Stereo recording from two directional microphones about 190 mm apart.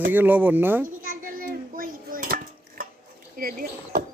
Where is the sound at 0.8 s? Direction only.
45° right (ahead or behind).